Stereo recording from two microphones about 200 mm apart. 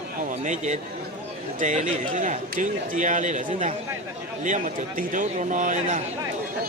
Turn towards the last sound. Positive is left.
turn(degrees=-40)  # may be behind; listen again after turning